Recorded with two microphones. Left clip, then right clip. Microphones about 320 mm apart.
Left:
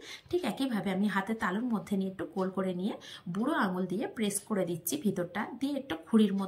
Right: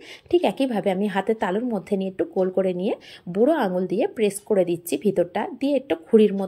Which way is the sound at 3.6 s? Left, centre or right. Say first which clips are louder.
Right 11 dB; centre.